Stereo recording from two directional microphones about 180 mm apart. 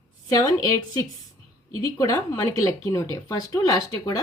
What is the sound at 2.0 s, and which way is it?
Speech, 20° left (ahead or behind).